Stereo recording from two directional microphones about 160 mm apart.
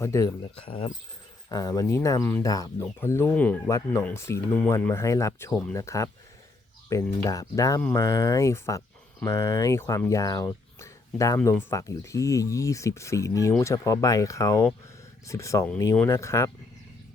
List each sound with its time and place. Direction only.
0.0 s speech: 20° left (ahead or behind)
0.6 s speech: 35° left (ahead or behind)
1.5 s speech: 25° left (ahead or behind)
3.7 s speech: 20° left (ahead or behind)
7.3 s speech: 20° left (ahead or behind)